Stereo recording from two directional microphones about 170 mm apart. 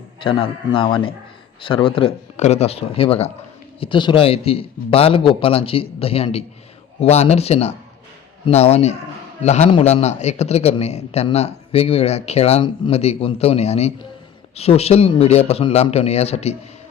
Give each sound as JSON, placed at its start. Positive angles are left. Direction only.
{"t": 0.2, "sound": "a man's voice", "side_deg": 30}